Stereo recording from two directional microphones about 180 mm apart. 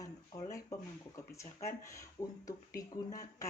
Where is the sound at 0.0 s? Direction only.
20° left (ahead or behind).